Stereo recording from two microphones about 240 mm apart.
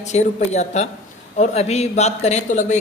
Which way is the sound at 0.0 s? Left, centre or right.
Left.